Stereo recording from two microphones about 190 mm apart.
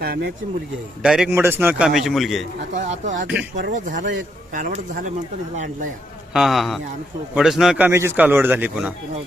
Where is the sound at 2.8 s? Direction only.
40° right (ahead or behind).